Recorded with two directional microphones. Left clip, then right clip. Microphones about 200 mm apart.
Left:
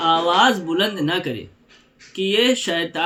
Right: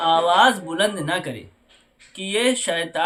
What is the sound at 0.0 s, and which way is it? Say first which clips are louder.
Speech: even; 20° right (ahead or behind).